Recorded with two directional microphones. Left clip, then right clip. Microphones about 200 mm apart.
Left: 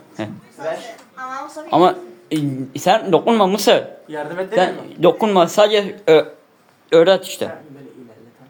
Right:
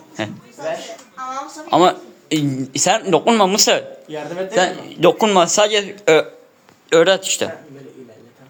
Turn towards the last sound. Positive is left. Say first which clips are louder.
# left 1 dB
turn(degrees=0)  # may be behind; listen again after turning